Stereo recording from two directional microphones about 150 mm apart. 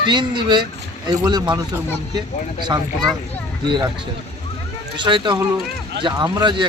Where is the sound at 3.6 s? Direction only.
30° right (ahead or behind).